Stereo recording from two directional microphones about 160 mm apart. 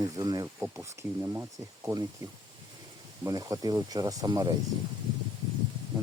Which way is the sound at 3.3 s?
20° right (ahead or behind).